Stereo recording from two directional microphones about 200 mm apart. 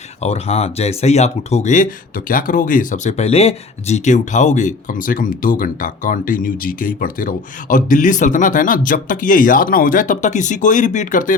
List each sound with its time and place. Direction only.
0.2 s speech: 30° left (ahead or behind)